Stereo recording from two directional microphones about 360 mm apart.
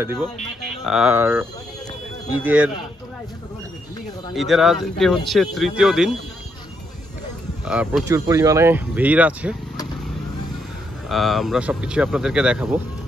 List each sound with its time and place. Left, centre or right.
0.0 s speech: centre
4.3 s speech: centre
7.6 s speech: centre
11.1 s speech: centre